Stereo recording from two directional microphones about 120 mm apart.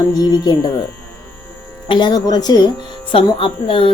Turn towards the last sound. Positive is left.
turn(degrees=45)  # may be behind; listen again after turning